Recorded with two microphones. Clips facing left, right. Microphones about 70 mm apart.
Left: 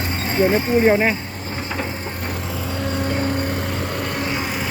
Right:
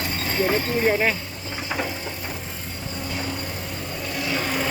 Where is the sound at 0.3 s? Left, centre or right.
Left.